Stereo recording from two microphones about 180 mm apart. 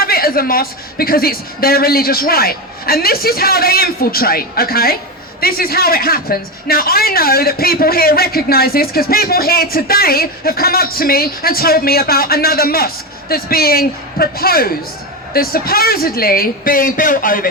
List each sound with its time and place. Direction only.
0.0 s a man's voice: 55° left (ahead or behind)